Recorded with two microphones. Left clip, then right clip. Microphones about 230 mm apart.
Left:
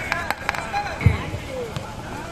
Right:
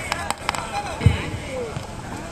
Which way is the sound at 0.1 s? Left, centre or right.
Right.